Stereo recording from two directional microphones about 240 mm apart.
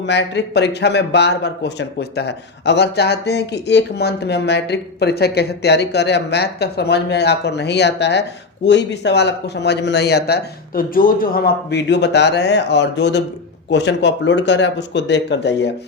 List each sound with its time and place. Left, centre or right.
0.0 s a man's voice: left